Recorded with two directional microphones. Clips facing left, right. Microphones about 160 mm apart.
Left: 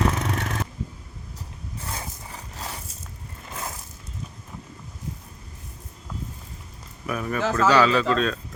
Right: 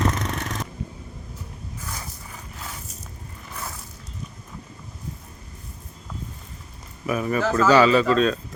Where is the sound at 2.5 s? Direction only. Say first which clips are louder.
Left 3 dB; 35° left (ahead or behind).